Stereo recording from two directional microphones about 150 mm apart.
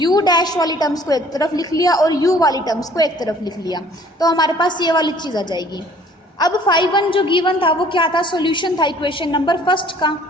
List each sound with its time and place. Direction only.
0.0 s a woman's voice: 25° left (ahead or behind)